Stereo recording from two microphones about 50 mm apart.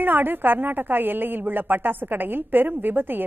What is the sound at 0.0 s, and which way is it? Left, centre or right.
A woman's voice, right.